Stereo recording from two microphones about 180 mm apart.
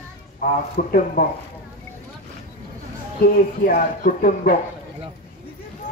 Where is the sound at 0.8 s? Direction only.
50° left (ahead or behind).